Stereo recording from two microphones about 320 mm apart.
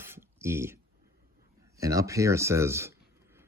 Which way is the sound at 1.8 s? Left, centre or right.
Centre.